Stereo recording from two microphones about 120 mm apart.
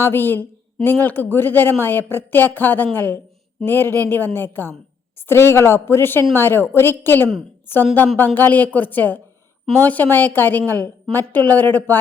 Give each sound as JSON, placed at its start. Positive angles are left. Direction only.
{"t": 0.0, "sound": "a woman's voice", "side_deg": 20}